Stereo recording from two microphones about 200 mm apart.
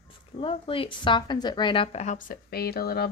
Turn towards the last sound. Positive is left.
turn(degrees=50)  # may be behind; listen again after turning